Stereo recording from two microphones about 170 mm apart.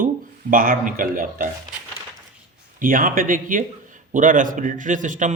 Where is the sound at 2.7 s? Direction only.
55° right (ahead or behind).